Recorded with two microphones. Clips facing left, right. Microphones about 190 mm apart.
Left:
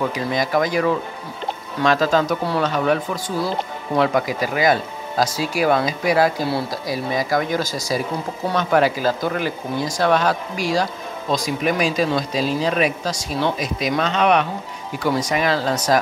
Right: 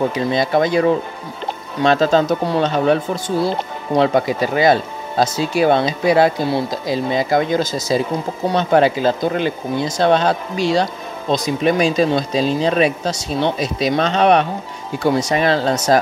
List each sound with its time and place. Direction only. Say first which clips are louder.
0.0 s speech: right 4 dB; 30° right (ahead or behind)